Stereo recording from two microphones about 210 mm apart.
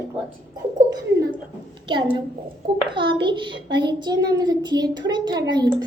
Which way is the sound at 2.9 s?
25° right (ahead or behind).